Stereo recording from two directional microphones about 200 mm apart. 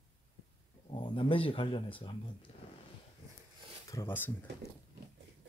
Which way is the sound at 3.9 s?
15° left (ahead or behind).